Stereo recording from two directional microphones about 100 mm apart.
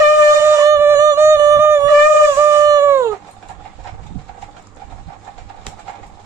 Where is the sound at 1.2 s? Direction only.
30° right (ahead or behind).